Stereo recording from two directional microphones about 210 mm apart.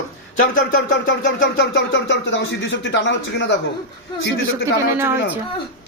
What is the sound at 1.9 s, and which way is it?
Speech, 60° left (ahead or behind).